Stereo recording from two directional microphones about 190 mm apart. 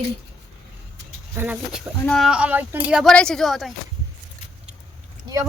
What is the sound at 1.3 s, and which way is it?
Speech, 10° right (ahead or behind).